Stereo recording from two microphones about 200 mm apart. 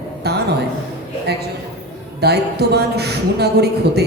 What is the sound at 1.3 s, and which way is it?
A man's voice, 55° right (ahead or behind).